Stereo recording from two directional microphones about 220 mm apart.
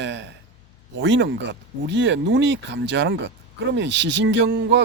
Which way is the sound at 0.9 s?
55° right (ahead or behind).